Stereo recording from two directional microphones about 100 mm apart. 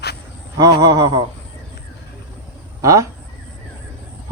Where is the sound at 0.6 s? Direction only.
40° right (ahead or behind).